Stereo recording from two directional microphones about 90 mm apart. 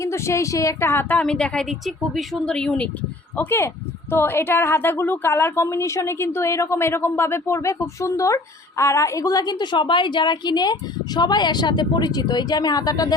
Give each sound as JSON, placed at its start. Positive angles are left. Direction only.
{"t": 0.0, "sound": "a woman's voice", "side_deg": 35}
{"t": 1.2, "sound": "a woman's voice", "side_deg": 10}
{"t": 3.3, "sound": "a woman's voice", "side_deg": 25}